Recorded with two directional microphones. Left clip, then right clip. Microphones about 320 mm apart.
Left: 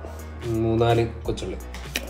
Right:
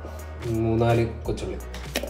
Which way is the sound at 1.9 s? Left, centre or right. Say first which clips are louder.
Right 1 dB; centre.